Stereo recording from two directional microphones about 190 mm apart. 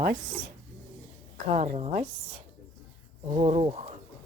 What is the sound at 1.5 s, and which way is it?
Speech, 35° right (ahead or behind).